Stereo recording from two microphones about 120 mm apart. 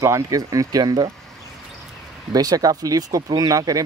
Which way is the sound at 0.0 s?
25° right (ahead or behind).